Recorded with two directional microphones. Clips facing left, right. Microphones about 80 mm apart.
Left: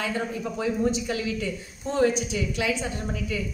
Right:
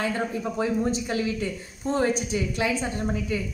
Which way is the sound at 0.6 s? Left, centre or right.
Right.